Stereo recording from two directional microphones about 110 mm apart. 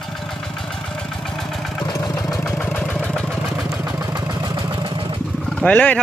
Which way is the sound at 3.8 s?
35° right (ahead or behind).